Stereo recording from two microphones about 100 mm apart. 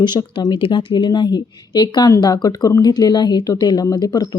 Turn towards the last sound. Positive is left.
turn(degrees=40)  # may be behind; listen again after turning